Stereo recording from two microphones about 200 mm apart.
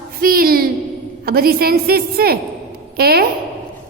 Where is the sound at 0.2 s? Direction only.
45° right (ahead or behind).